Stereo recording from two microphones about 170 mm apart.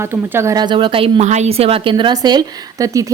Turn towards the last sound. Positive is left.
turn(degrees=-20)  # may be behind; listen again after turning